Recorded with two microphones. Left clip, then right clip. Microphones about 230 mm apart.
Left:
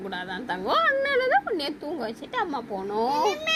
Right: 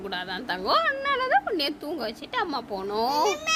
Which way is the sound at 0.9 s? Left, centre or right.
Right.